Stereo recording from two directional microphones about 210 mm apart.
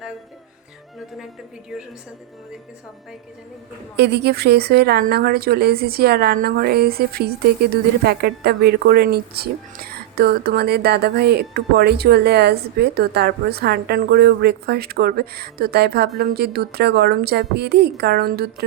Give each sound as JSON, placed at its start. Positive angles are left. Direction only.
{"t": 1.7, "sound": "a woman's voice", "side_deg": 0}
{"t": 3.9, "sound": "a woman's voice", "side_deg": -50}